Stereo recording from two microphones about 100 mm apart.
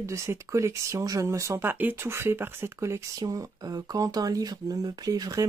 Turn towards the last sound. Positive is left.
turn(degrees=-35)  # may be behind; listen again after turning